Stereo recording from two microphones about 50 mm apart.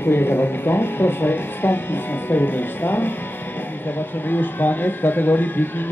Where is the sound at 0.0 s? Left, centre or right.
Left.